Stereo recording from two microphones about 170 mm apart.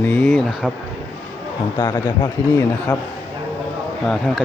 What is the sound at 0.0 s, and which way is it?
Speech, 10° left (ahead or behind).